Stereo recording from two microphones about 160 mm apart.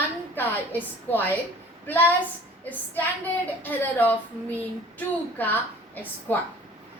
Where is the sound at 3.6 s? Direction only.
10° left (ahead or behind).